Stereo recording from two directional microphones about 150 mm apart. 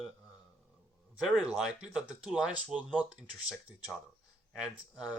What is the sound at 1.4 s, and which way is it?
Speech, 5° right (ahead or behind).